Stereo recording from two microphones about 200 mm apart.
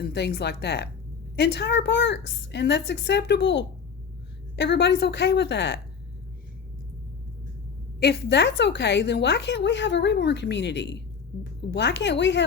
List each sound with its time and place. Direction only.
0.0 s a woman's voice: 55° left (ahead or behind)
7.9 s a woman's voice: 55° left (ahead or behind)